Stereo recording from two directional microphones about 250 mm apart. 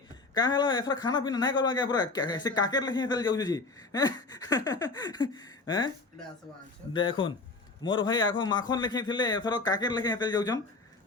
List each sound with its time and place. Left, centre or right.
0.3 s a man's voice: centre
6.9 s a man's voice: centre